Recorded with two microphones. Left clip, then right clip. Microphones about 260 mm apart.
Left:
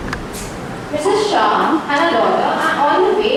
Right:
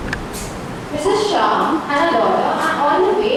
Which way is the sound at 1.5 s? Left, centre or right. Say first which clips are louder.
Left 2 dB; centre.